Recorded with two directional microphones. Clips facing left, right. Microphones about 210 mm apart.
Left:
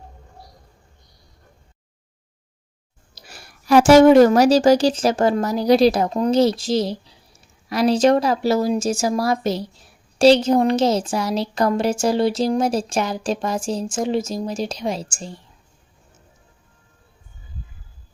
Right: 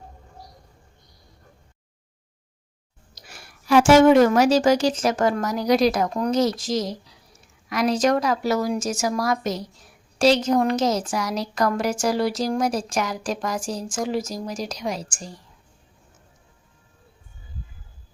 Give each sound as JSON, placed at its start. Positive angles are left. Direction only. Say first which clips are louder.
{"t": 3.2, "sound": "a woman's voice", "louder": "left 2 dB", "side_deg": 35}